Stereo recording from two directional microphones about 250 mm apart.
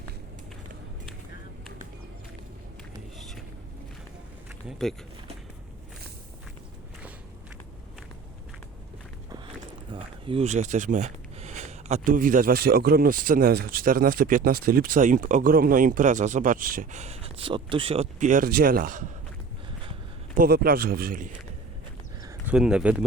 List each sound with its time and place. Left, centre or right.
4.8 s speech: centre
9.9 s speech: right
20.3 s speech: right
22.2 s speech: centre